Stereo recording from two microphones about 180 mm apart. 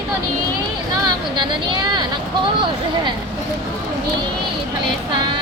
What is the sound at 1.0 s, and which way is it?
Speech, 25° right (ahead or behind).